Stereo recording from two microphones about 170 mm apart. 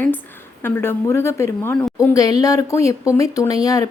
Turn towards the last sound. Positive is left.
turn(degrees=20)  # may be behind; listen again after turning